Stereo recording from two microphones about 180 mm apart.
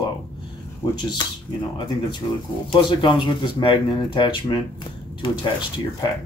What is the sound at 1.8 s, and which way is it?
Speech, 25° left (ahead or behind).